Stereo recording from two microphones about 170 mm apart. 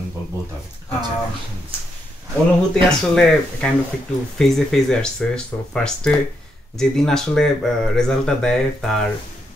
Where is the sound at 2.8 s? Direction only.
5° left (ahead or behind).